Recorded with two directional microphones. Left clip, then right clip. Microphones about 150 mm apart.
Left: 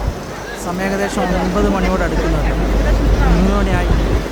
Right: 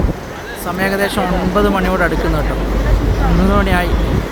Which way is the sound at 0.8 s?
15° right (ahead or behind).